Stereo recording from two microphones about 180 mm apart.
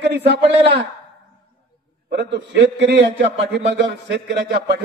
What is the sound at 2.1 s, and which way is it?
A man's voice, 70° right (ahead or behind).